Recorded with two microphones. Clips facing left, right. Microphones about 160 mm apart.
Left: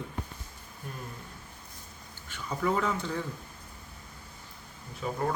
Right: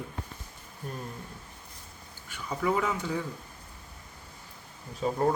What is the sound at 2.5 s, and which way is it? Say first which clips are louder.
Speech: right 1 dB; 10° right (ahead or behind).